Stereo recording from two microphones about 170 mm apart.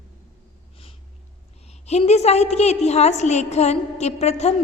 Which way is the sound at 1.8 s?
40° left (ahead or behind).